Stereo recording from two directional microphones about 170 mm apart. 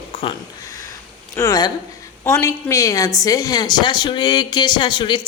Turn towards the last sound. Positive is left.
turn(degrees=25)  # may be behind; listen again after turning